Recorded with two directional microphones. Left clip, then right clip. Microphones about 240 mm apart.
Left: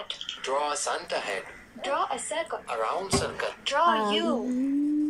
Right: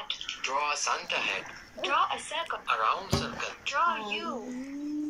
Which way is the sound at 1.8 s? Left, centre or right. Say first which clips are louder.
Right 1 dB; left.